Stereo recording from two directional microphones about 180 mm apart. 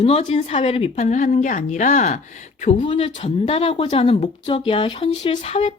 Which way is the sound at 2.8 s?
30° left (ahead or behind).